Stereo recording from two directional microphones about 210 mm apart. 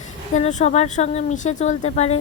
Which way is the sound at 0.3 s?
35° left (ahead or behind).